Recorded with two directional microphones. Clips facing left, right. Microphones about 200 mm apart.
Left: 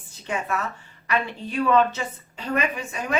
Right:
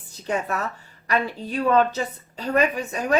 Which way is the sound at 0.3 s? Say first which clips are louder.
Right 2 dB; 35° right (ahead or behind).